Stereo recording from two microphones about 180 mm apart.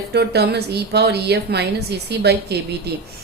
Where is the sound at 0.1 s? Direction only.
65° right (ahead or behind).